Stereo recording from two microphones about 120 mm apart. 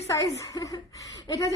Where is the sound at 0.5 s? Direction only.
30° left (ahead or behind).